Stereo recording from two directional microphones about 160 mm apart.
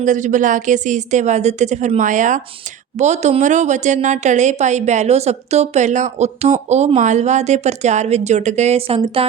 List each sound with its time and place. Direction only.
0.0 s a woman's voice: 50° right (ahead or behind); by 9.2 s 35° right (ahead or behind)